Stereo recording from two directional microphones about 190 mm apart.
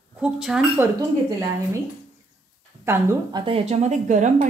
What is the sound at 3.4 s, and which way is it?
Speech, 30° right (ahead or behind).